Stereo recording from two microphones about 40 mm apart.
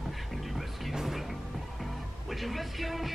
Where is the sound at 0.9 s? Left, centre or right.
Centre.